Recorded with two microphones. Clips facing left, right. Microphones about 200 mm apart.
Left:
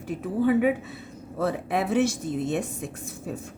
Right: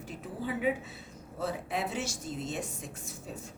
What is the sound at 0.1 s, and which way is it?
A woman's voice, 60° left (ahead or behind).